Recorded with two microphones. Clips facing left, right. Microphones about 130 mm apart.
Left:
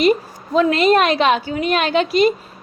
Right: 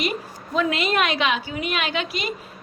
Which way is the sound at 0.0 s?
35° left (ahead or behind).